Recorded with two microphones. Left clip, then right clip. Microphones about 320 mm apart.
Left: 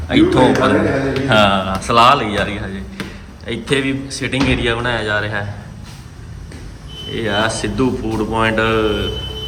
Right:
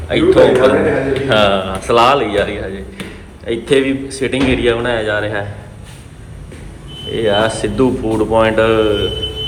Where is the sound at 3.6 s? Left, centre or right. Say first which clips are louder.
Right 4 dB; centre.